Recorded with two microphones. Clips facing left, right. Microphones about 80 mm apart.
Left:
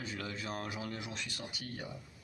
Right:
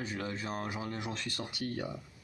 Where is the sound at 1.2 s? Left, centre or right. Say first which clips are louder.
Right 6 dB; right.